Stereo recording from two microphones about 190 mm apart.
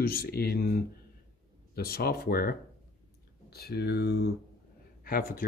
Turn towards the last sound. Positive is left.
turn(degrees=50)  # may be behind; listen again after turning